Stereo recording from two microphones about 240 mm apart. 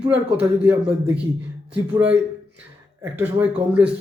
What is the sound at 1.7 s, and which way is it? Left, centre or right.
A man's voice, centre.